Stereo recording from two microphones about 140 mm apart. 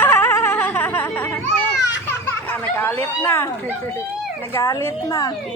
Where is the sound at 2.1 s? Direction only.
15° left (ahead or behind).